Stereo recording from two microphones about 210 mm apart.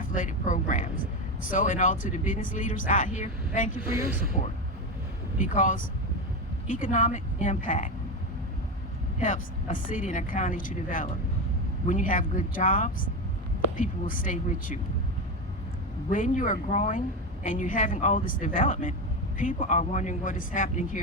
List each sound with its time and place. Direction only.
0.0 s a sound: 40° left (ahead or behind)
1.4 s speech: 40° left (ahead or behind)
5.4 s speech: 40° left (ahead or behind)
9.2 s speech: 40° left (ahead or behind)
16.0 s speech: 40° left (ahead or behind)